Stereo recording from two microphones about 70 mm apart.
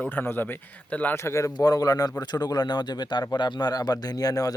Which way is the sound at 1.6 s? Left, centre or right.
Left.